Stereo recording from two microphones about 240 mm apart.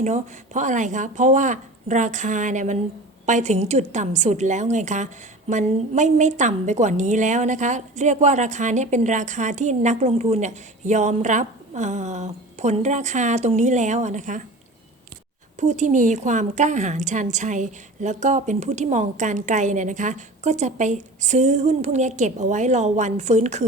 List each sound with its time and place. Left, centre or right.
0.0 s a woman's voice: right
15.6 s a woman's voice: right